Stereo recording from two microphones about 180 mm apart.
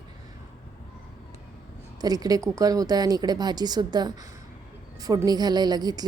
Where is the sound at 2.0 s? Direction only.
20° right (ahead or behind).